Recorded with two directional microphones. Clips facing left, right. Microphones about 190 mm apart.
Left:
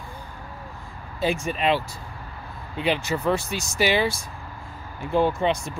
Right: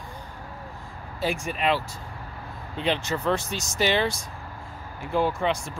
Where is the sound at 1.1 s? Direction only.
20° left (ahead or behind).